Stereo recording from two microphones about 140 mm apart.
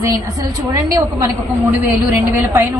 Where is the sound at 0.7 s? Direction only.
25° right (ahead or behind).